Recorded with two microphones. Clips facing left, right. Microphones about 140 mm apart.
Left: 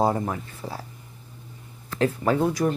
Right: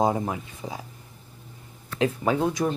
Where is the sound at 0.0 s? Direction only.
10° right (ahead or behind).